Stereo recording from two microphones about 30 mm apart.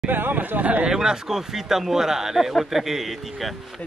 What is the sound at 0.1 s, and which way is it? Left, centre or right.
Speech, right.